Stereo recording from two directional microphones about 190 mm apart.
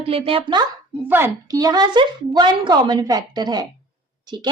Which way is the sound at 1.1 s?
10° right (ahead or behind).